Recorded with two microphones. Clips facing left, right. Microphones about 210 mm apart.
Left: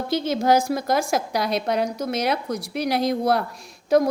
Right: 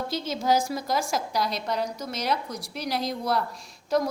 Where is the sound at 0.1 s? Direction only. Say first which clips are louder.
Left 7 dB; 60° left (ahead or behind).